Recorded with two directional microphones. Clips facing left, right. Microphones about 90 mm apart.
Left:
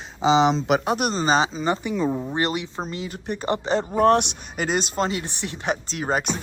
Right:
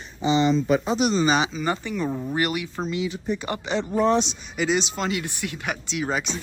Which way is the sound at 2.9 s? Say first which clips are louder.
Right 5 dB; 40° left (ahead or behind).